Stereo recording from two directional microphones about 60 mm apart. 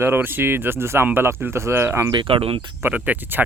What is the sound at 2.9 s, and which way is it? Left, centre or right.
Speech, right.